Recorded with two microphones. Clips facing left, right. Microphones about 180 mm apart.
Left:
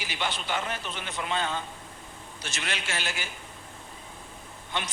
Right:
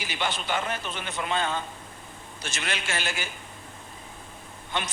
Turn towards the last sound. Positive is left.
turn(degrees=-55)  # may be behind; listen again after turning